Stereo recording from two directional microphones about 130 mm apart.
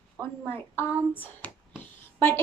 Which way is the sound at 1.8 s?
20° left (ahead or behind).